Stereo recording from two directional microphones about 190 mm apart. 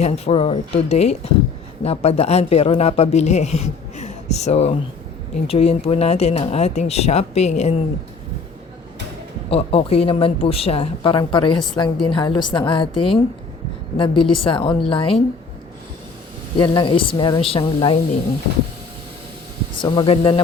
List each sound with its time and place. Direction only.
0.0 s speech: 30° left (ahead or behind)
9.5 s speech: 30° left (ahead or behind)
16.6 s speech: 25° left (ahead or behind)
19.8 s speech: 25° left (ahead or behind)